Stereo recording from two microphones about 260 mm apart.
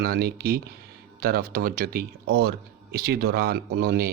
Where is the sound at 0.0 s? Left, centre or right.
Right.